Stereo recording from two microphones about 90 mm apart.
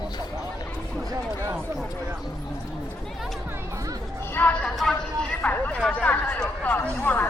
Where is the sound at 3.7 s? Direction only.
40° right (ahead or behind).